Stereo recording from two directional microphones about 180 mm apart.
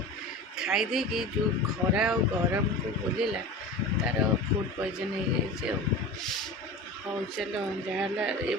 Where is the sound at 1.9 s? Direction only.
5° right (ahead or behind).